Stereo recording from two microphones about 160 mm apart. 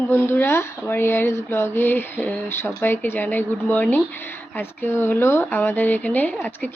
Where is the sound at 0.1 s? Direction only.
15° left (ahead or behind).